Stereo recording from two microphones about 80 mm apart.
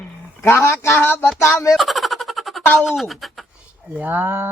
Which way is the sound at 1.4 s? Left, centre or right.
Left.